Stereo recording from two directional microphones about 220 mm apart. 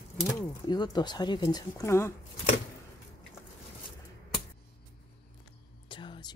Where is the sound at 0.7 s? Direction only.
20° left (ahead or behind).